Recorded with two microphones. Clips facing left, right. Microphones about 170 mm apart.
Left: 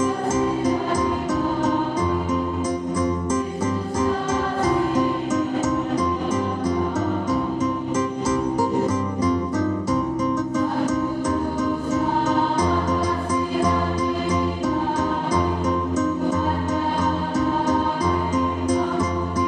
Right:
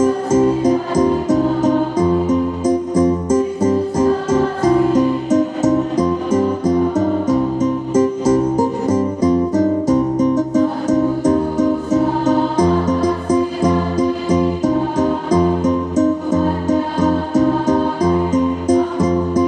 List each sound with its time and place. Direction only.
2.7 s music: 45° right (ahead or behind)
7.9 s music: 40° right (ahead or behind)
10.9 s music: 20° right (ahead or behind)
13.6 s music: 20° right (ahead or behind)
16.6 s music: 20° right (ahead or behind)